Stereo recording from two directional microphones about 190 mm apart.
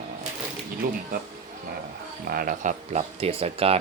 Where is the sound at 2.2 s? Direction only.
50° right (ahead or behind); by 3.7 s 30° right (ahead or behind).